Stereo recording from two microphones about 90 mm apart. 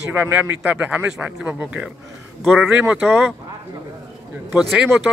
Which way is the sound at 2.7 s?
15° right (ahead or behind).